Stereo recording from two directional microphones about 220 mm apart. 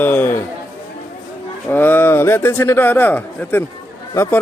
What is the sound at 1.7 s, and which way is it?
Speech, 10° left (ahead or behind).